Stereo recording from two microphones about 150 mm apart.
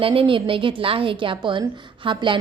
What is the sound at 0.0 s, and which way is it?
A woman's voice, 35° right (ahead or behind).